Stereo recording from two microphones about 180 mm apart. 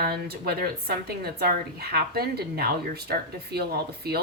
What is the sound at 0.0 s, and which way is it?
A woman's voice, 60° right (ahead or behind).